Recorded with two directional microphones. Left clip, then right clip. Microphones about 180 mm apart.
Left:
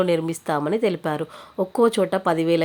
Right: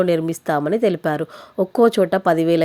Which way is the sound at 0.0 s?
25° right (ahead or behind).